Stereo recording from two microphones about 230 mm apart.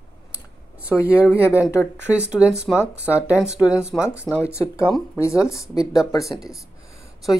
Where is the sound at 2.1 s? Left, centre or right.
Centre.